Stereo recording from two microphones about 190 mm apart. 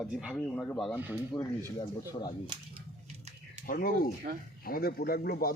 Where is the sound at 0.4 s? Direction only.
5° left (ahead or behind).